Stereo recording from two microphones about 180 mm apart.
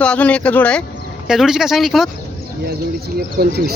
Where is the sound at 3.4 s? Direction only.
60° right (ahead or behind).